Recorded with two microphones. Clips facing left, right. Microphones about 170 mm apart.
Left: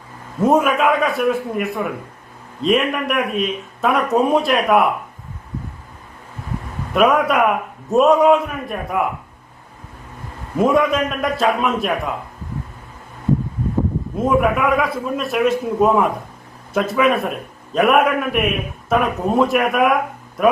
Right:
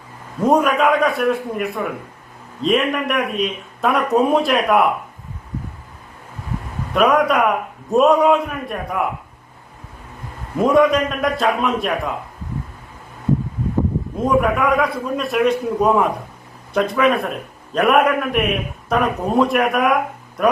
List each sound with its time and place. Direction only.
0.4 s speech: centre (ahead or behind)
6.9 s speech: centre (ahead or behind)
10.6 s speech: centre (ahead or behind)
14.3 s speech: centre (ahead or behind)